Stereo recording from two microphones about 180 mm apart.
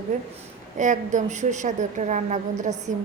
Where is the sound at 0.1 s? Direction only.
45° right (ahead or behind).